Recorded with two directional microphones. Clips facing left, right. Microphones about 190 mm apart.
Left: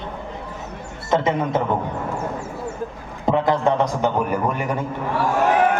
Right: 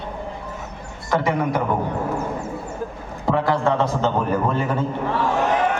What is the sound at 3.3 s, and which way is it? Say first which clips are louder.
A man's voice: left 1 dB; 20° left (ahead or behind).